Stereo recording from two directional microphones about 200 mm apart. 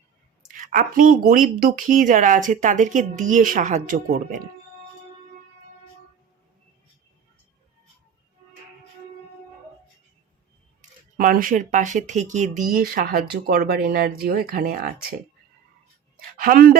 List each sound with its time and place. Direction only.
0.5 s speech: 40° right (ahead or behind)
10.8 s speech: 45° right (ahead or behind)
16.4 s speech: 45° right (ahead or behind)